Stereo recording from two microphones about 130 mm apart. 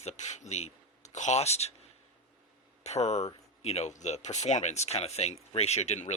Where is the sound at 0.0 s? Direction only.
60° left (ahead or behind).